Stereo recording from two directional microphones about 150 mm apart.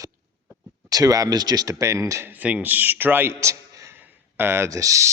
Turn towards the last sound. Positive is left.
turn(degrees=-20)  # may be behind; listen again after turning